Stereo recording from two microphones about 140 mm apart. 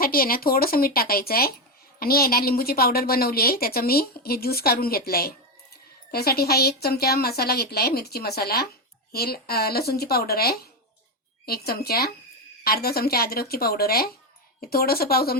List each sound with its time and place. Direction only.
0.0 s a woman's voice: 90° left